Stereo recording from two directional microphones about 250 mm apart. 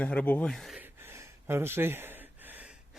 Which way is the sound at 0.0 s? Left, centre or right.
Centre.